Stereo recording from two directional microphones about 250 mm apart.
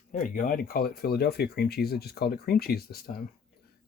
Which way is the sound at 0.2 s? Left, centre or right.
Left.